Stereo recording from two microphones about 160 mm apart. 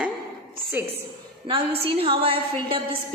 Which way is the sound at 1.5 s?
35° right (ahead or behind).